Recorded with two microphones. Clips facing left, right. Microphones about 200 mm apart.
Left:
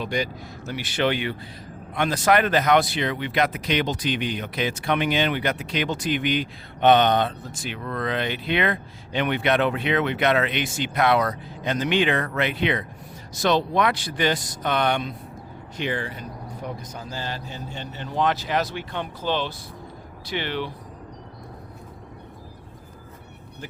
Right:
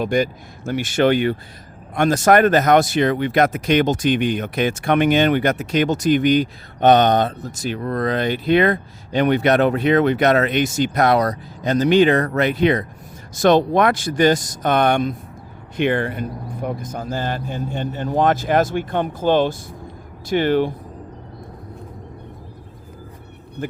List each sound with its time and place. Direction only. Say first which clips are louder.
0.0 s speech: right 7 dB; 50° right (ahead or behind)
15.8 s speech: right 9 dB; 60° right (ahead or behind)